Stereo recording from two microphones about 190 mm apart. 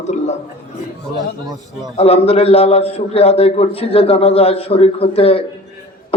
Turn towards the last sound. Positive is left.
turn(degrees=30)  # may be behind; listen again after turning